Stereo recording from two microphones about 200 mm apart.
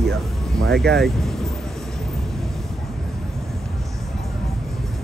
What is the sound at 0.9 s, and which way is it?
Speech, centre (ahead or behind).